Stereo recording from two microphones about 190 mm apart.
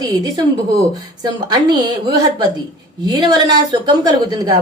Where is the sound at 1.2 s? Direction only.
20° right (ahead or behind).